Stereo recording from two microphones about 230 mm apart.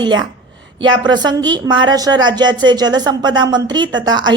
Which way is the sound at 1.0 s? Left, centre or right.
Centre.